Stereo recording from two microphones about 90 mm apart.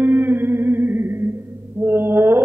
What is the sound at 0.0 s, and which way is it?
Music, 20° right (ahead or behind).